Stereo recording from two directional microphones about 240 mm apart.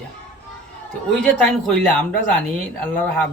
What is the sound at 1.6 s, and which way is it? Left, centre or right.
A man's voice, centre.